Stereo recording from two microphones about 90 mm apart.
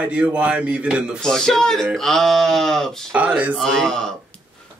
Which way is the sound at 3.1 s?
15° right (ahead or behind).